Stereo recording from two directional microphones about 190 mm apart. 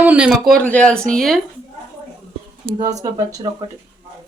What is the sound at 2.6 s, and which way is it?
Speech, 20° right (ahead or behind).